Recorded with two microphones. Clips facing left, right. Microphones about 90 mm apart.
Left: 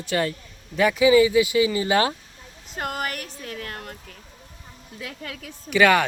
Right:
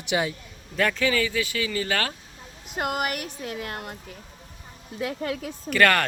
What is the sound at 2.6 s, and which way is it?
Speech, 10° right (ahead or behind).